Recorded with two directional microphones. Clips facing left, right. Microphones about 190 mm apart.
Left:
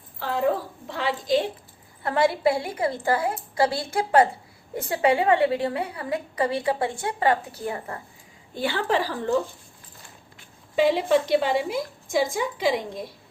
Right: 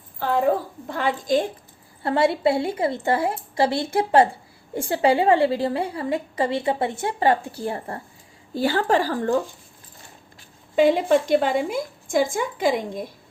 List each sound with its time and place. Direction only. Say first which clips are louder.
0.9 s a woman's voice: right 2 dB; 50° right (ahead or behind)
2.0 s a woman's voice: right 2 dB; 25° right (ahead or behind); by 9.3 s 45° right (ahead or behind)
10.8 s a woman's voice: right 3 dB; 50° right (ahead or behind)